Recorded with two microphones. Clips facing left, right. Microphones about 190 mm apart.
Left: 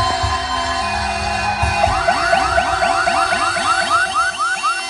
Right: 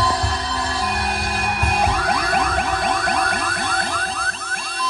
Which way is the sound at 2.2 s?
55° right (ahead or behind).